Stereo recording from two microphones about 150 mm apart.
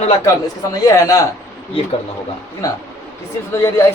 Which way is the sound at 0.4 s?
20° left (ahead or behind).